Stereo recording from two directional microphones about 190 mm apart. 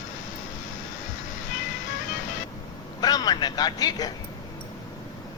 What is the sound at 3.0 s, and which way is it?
Speech, 20° left (ahead or behind).